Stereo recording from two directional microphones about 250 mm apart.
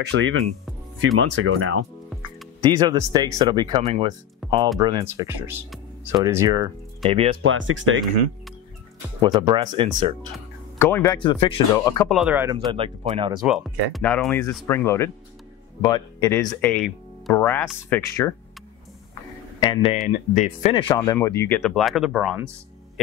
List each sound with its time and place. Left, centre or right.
0.0 s speech: right
2.6 s speech: centre
4.4 s music: centre
4.7 s speech: centre
7.4 s speech: right
9.2 s speech: centre
10.8 s speech: centre
12.1 s speech: centre
12.7 s speech: right
13.4 s speech: centre
19.6 s speech: centre
21.0 s speech: centre